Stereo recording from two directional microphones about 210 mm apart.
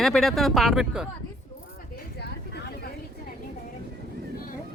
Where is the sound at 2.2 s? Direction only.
50° left (ahead or behind).